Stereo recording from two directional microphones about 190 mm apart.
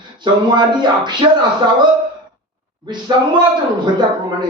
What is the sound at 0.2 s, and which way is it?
Speech, 25° right (ahead or behind).